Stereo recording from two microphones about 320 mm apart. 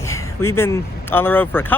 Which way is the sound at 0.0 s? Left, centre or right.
Centre.